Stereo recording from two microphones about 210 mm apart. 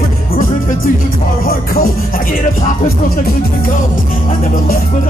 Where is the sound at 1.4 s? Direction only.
45° left (ahead or behind).